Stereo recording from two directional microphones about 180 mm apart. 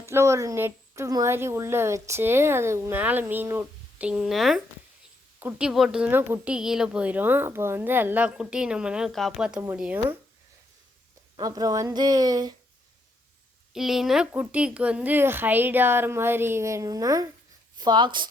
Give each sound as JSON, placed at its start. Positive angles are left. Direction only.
{"t": 0.0, "sound": "a woman's voice", "side_deg": -15}
{"t": 11.3, "sound": "speech", "side_deg": -20}
{"t": 13.7, "sound": "a woman's voice", "side_deg": 0}